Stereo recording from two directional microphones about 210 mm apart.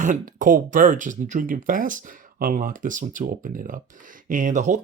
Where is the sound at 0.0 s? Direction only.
40° right (ahead or behind).